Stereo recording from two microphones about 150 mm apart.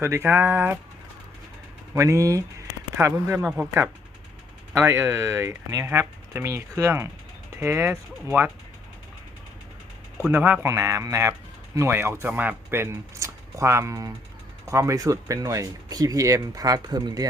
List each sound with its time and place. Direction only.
0.0 s speech: 15° right (ahead or behind)
2.0 s speech: 20° right (ahead or behind)
4.7 s speech: 15° right (ahead or behind)
10.3 s speech: 15° right (ahead or behind)